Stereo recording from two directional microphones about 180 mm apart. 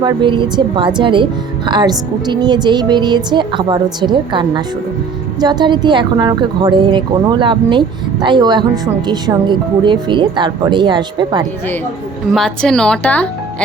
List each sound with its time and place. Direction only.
0.0 s a woman's voice: 25° right (ahead or behind)
12.3 s a woman's voice: 5° left (ahead or behind)